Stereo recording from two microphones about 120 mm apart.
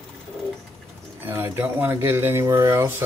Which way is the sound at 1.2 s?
20° right (ahead or behind).